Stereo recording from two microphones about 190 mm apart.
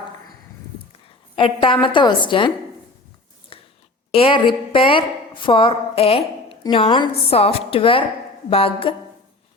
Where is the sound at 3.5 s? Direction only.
30° left (ahead or behind).